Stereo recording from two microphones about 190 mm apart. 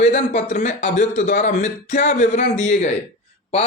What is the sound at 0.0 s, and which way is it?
A man's voice, 40° left (ahead or behind).